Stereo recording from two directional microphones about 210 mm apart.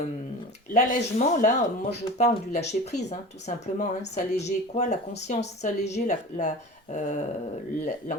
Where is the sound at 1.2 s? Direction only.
35° left (ahead or behind).